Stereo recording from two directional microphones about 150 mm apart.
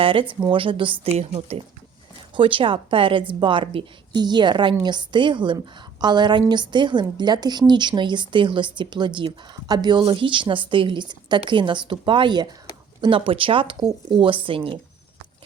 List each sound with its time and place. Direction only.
0.0 s speech: 35° right (ahead or behind)
1.0 s a woman's voice: 45° right (ahead or behind)